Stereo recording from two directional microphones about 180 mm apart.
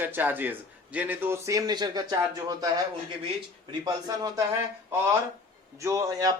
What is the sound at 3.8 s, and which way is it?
Speech, 20° right (ahead or behind).